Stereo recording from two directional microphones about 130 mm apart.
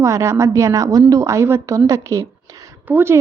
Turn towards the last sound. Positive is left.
turn(degrees=-15)  # may be behind; listen again after turning